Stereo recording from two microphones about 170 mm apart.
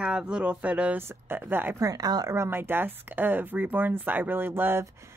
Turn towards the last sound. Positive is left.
turn(degrees=-15)  # may be behind; listen again after turning